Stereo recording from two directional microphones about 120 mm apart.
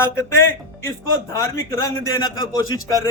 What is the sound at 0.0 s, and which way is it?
A man's voice, 20° left (ahead or behind).